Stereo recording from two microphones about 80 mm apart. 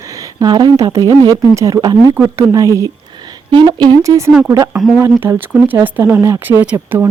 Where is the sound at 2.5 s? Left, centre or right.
Right.